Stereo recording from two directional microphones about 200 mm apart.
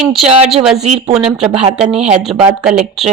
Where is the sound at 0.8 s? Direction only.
30° right (ahead or behind).